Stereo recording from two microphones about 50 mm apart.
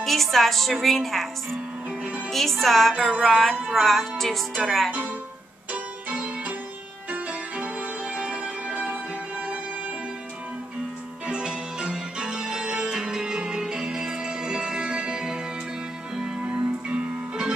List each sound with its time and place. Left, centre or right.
0.0 s a woman's voice: centre
5.7 s music: right
11.2 s music: centre